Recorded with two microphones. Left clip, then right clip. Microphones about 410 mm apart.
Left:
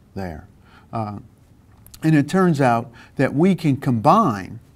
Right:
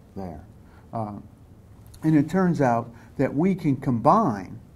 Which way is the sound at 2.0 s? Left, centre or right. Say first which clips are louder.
Left 4 dB; left.